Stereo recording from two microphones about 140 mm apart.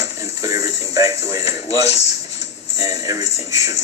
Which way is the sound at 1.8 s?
50° left (ahead or behind).